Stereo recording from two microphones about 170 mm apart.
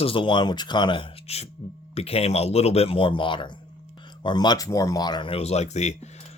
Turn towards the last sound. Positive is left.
turn(degrees=40)  # may be behind; listen again after turning